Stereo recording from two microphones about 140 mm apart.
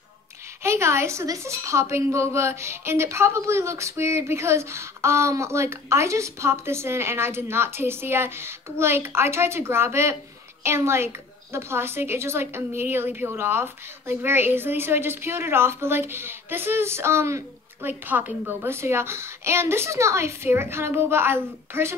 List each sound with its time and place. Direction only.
0.6 s a woman's voice: 20° right (ahead or behind)